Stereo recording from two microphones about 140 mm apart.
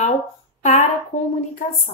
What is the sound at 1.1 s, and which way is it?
Speech, 60° left (ahead or behind).